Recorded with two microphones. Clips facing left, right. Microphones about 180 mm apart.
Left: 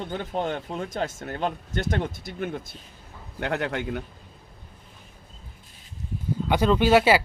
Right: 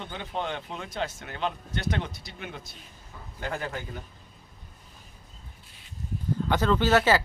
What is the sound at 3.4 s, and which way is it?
Speech, 75° left (ahead or behind).